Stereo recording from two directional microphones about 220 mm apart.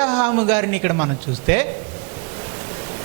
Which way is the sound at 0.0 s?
20° right (ahead or behind).